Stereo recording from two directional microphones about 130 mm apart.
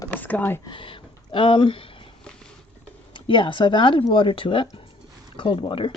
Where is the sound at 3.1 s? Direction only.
40° left (ahead or behind).